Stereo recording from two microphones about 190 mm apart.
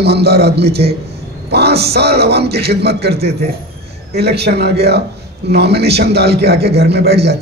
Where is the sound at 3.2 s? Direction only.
35° right (ahead or behind).